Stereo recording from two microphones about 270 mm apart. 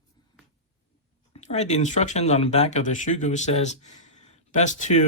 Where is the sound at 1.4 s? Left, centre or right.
Left.